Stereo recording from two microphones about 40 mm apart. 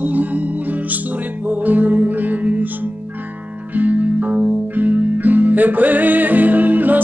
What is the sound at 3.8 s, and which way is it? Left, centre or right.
Music, right.